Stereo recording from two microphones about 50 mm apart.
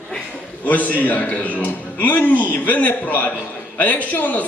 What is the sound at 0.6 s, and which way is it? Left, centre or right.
A man's voice, left.